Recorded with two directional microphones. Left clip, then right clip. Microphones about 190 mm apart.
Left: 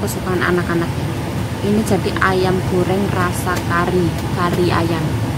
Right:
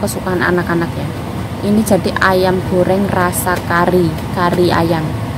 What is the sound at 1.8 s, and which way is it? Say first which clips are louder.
A woman's voice: right 6 dB; 20° right (ahead or behind).